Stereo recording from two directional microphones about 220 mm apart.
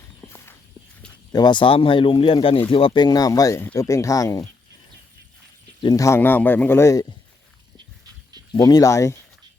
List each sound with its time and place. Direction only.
0.2 s walk: 5° left (ahead or behind)
1.3 s speech: 20° left (ahead or behind)
5.8 s speech: 15° left (ahead or behind)
8.5 s speech: 15° left (ahead or behind)